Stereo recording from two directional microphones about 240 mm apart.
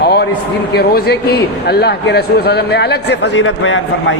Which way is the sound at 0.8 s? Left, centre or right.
Left.